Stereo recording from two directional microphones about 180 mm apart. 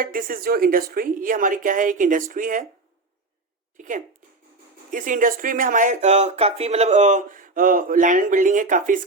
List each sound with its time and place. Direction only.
0.0 s speech: 50° right (ahead or behind)
3.8 s speech: 45° right (ahead or behind)